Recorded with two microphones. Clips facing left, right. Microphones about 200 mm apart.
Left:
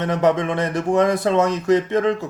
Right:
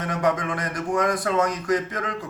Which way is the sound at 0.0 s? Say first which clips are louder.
Left 6 dB; 25° left (ahead or behind).